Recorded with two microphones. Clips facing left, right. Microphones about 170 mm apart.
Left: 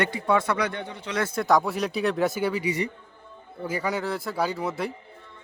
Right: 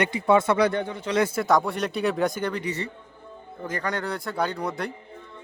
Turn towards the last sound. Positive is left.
turn(degrees=5)  # may be behind; listen again after turning